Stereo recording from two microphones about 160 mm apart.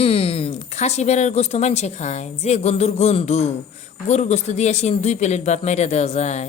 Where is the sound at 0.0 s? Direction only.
35° left (ahead or behind).